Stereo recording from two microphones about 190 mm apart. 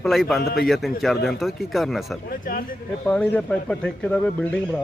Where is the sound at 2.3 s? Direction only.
50° left (ahead or behind).